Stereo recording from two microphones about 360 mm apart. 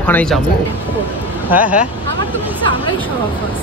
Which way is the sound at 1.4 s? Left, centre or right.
Centre.